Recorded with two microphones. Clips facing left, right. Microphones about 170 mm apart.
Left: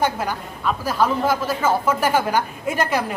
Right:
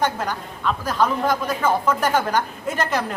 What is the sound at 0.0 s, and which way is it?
A woman's voice, 10° left (ahead or behind).